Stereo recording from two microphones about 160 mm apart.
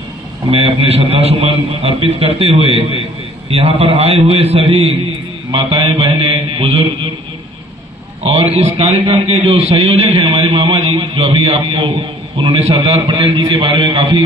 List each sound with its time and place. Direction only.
0.5 s a man's voice: 40° right (ahead or behind)
8.2 s a man's voice: 40° right (ahead or behind)
13.0 s a man's voice: 30° right (ahead or behind)